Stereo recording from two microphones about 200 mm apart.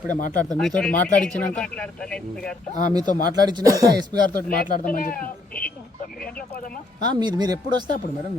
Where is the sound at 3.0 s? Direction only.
40° left (ahead or behind).